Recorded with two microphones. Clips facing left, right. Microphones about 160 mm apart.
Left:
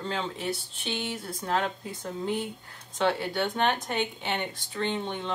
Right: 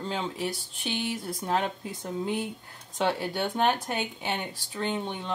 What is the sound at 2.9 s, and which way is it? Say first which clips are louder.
Speech: left 1 dB; 15° right (ahead or behind).